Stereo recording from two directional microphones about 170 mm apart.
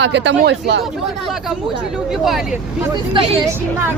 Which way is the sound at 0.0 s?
90° right.